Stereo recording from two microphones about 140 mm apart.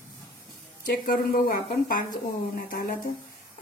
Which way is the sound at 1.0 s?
85° left.